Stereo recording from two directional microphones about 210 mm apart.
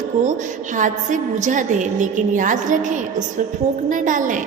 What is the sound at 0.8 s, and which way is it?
A woman's voice, 35° right (ahead or behind).